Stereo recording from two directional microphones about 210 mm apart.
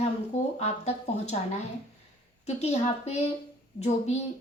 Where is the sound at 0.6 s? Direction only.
30° left (ahead or behind).